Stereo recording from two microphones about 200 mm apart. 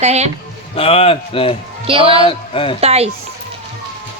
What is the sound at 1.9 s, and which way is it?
Speech, 25° right (ahead or behind).